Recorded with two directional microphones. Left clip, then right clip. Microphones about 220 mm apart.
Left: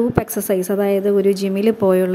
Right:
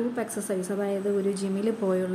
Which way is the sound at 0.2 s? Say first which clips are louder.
Left 10 dB; 35° left (ahead or behind).